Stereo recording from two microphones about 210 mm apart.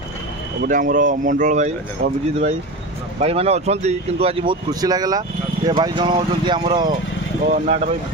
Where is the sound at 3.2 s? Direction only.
30° right (ahead or behind).